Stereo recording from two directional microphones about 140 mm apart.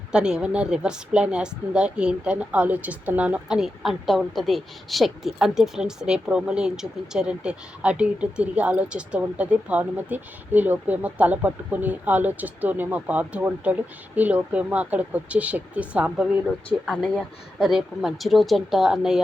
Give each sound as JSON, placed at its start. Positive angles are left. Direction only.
{"t": 0.1, "sound": "speech", "side_deg": -5}